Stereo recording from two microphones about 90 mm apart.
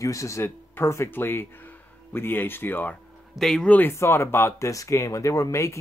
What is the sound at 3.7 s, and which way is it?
Speech, 25° left (ahead or behind).